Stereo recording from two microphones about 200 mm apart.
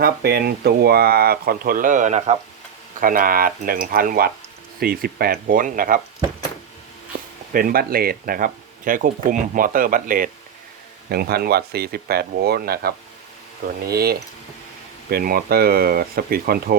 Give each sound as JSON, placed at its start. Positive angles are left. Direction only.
{"t": 0.0, "sound": "speech", "side_deg": -50}
{"t": 7.1, "sound": "a sound", "side_deg": -45}
{"t": 7.5, "sound": "speech", "side_deg": -45}